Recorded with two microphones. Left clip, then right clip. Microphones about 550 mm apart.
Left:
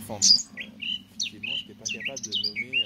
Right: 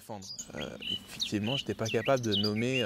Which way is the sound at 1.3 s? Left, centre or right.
Right.